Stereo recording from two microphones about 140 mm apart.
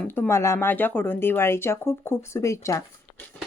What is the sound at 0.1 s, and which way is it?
Speech, 15° left (ahead or behind).